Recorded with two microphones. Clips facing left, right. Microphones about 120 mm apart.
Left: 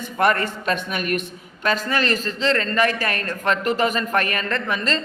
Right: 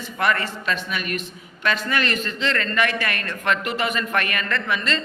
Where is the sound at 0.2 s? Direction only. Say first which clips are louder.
Left 3 dB; 45° left (ahead or behind).